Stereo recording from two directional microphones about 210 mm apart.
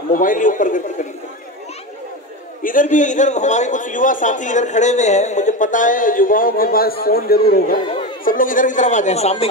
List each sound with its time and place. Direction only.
0.1 s a man's voice: 40° left (ahead or behind)
2.6 s a man's voice: 40° left (ahead or behind)